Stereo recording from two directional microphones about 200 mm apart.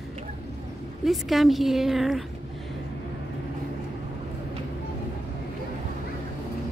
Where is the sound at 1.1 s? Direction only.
Centre (ahead or behind).